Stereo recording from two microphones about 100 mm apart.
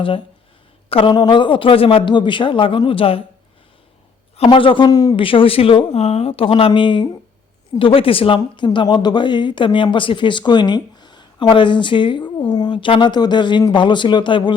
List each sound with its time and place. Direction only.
0.9 s speech: 65° left (ahead or behind)
1.1 s speech: 45° left (ahead or behind); by 3.2 s 65° left (ahead or behind)
4.4 s speech: 55° left (ahead or behind)
4.9 s a man's voice: 40° left (ahead or behind)
5.1 s speech: 60° left (ahead or behind)